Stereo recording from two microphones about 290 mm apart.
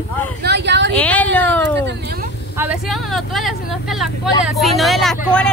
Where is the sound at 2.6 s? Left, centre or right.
Centre.